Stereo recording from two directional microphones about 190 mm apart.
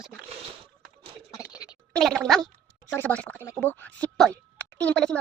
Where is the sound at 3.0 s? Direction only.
5° left (ahead or behind).